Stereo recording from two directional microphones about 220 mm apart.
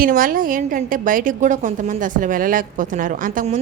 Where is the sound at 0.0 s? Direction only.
40° right (ahead or behind).